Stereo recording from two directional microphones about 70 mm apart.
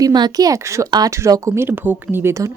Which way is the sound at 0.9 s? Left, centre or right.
Right.